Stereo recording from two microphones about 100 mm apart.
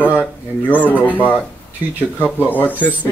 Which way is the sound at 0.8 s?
15° right (ahead or behind).